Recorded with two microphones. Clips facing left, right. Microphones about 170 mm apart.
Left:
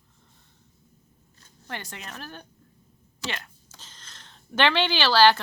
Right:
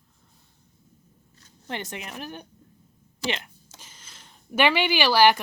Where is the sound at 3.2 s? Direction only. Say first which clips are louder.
Right 5 dB; 15° right (ahead or behind).